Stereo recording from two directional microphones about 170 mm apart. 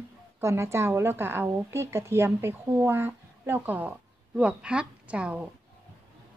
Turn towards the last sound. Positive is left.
turn(degrees=-5)  # may be behind; listen again after turning